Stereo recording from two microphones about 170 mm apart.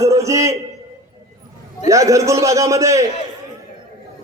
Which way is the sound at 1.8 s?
20° right (ahead or behind).